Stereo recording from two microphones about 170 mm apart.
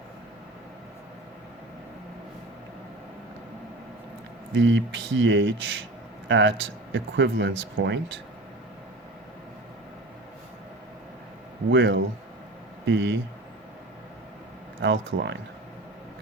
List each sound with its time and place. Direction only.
4.5 s speech: 90° right
11.7 s speech: 90° right
14.8 s speech: 90° right